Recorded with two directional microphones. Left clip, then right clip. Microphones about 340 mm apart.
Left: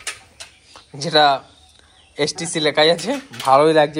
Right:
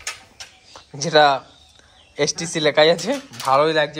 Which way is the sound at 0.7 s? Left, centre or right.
Centre.